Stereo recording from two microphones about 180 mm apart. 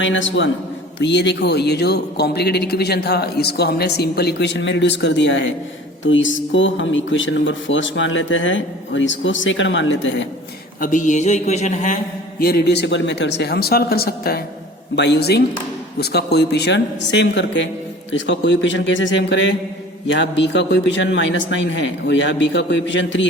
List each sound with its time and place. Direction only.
0.0 s speech: 90° left
0.9 s a man's voice: 75° left (ahead or behind); by 10.2 s 90° left
10.8 s speech: 50° left (ahead or behind)
12.4 s speech: 60° left (ahead or behind)
14.9 s a man's voice: 70° left (ahead or behind); by 23.3 s 90° left